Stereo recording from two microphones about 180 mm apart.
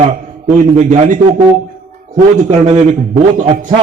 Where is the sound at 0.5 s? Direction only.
45° right (ahead or behind).